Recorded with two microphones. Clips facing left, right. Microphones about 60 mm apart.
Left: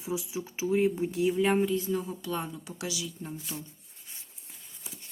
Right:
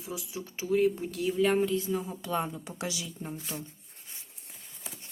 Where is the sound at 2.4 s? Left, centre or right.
Right.